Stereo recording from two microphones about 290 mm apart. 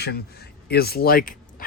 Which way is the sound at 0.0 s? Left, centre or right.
Left.